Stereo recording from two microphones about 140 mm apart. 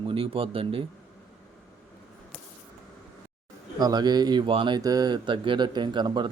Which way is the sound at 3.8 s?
30° right (ahead or behind).